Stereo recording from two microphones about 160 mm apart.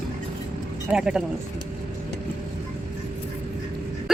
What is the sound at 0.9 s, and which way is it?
Speech, 5° right (ahead or behind).